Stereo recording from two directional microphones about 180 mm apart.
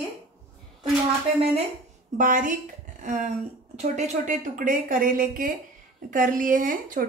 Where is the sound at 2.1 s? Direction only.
45° right (ahead or behind).